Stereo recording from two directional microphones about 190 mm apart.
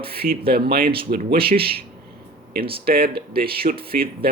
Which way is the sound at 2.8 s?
55° right (ahead or behind).